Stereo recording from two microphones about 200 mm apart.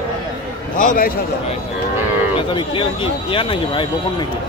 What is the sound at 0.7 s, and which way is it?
Speech, 45° left (ahead or behind).